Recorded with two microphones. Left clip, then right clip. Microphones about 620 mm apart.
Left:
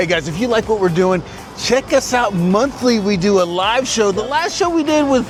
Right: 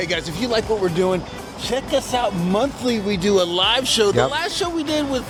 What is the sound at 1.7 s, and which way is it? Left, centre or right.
Speech, left.